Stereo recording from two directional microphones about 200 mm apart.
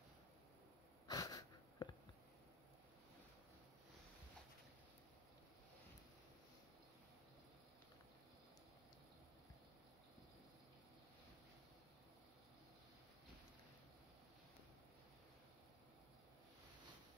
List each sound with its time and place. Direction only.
1.0 s wheeze: 20° left (ahead or behind)